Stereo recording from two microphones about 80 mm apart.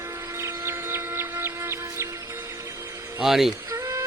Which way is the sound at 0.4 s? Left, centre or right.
Right.